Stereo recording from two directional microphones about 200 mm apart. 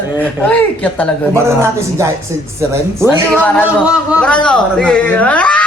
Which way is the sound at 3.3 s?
10° left (ahead or behind).